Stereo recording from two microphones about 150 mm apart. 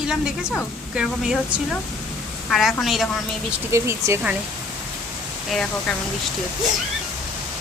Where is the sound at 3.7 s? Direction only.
20° right (ahead or behind).